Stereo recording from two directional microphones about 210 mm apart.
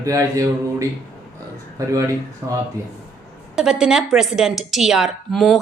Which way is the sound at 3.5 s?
5° right (ahead or behind).